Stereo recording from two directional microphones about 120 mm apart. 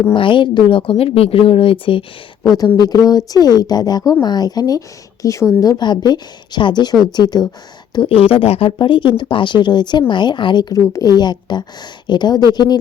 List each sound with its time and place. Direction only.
0.1 s speech: 45° left (ahead or behind)
2.7 s a woman's voice: 30° left (ahead or behind)
5.6 s a woman's voice: 35° left (ahead or behind)
7.9 s a woman's voice: 50° left (ahead or behind); by 12.7 s 35° left (ahead or behind)